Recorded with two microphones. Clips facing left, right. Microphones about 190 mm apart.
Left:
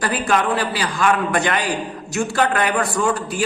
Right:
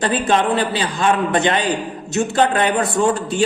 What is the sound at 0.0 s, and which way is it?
A man's voice, 25° right (ahead or behind).